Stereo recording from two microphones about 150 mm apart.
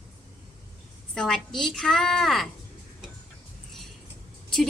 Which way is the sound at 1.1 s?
5° left (ahead or behind).